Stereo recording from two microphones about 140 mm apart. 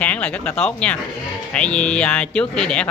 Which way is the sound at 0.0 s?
10° left (ahead or behind).